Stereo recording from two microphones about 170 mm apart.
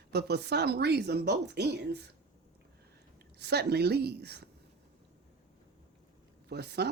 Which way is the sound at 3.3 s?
75° right (ahead or behind).